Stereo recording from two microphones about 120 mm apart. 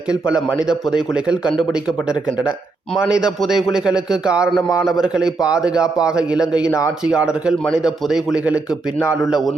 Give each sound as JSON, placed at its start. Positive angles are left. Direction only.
{"t": 0.1, "sound": "a man's voice", "side_deg": -5}
{"t": 6.7, "sound": "speech", "side_deg": 25}
{"t": 7.0, "sound": "a man's voice", "side_deg": -5}